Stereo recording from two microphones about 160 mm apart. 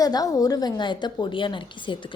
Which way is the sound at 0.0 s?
25° left (ahead or behind).